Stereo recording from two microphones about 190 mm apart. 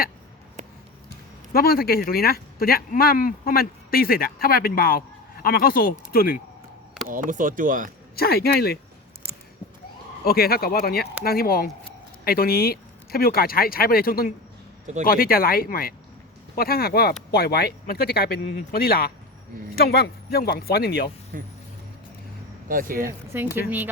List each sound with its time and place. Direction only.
1.5 s speech: 50° left (ahead or behind)
7.1 s speech: 45° right (ahead or behind)
8.1 s speech: 55° left (ahead or behind)
10.2 s speech: 55° left (ahead or behind)
21.3 s speech: 50° right (ahead or behind)
22.7 s speech: 45° right (ahead or behind)
23.0 s speech: 10° right (ahead or behind)